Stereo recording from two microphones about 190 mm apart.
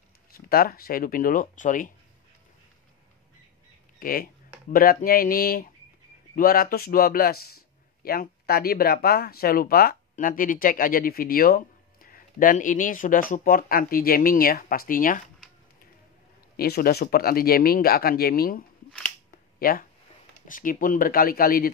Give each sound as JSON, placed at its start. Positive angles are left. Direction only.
{"t": 0.5, "sound": "speech", "side_deg": 50}
{"t": 4.0, "sound": "speech", "side_deg": 50}
{"t": 16.5, "sound": "speech", "side_deg": 55}
{"t": 19.6, "sound": "speech", "side_deg": 50}